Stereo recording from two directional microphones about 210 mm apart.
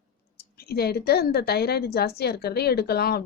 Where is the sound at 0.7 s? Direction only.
50° left (ahead or behind).